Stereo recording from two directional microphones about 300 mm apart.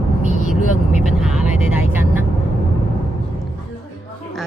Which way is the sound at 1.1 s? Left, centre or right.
Centre.